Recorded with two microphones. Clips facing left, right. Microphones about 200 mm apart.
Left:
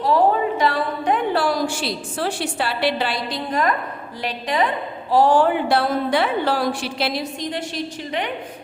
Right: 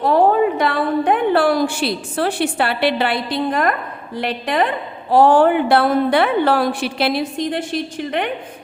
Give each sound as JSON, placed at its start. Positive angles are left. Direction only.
{"t": 0.6, "sound": "a woman's voice", "side_deg": -55}